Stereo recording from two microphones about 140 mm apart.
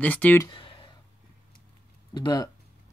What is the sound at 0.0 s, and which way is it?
Speech, 10° left (ahead or behind).